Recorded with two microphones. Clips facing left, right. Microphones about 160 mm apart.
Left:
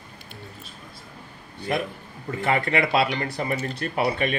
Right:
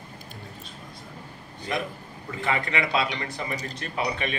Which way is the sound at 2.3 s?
40° left (ahead or behind).